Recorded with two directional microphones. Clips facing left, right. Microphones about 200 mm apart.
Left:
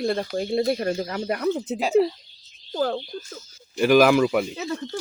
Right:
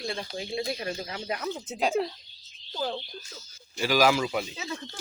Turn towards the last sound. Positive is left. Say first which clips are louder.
# left 8 dB
turn(degrees=50)  # may be behind; listen again after turning